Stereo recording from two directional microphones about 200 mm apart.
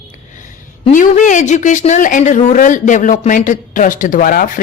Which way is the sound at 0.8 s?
40° left (ahead or behind).